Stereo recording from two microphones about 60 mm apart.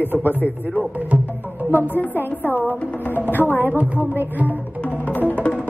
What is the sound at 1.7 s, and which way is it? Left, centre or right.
A man's voice, left.